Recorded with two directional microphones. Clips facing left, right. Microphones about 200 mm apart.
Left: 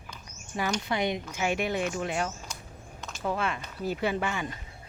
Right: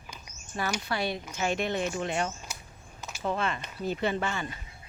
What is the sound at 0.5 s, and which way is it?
Speech, 15° left (ahead or behind).